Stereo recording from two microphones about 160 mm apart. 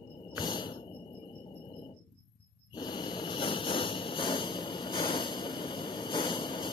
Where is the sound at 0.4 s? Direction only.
30° left (ahead or behind).